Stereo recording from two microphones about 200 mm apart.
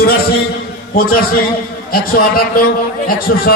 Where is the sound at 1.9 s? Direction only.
45° left (ahead or behind).